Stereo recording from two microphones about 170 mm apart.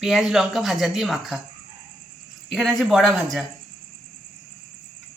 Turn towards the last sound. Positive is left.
turn(degrees=0)  # may be behind; listen again after turning